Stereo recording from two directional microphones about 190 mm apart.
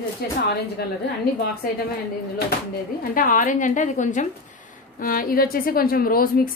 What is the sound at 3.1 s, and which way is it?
A woman's voice, 45° left (ahead or behind).